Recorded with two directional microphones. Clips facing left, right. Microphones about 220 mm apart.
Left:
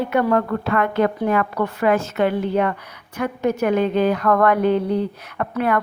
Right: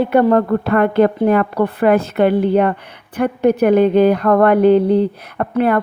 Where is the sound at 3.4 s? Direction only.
60° right (ahead or behind).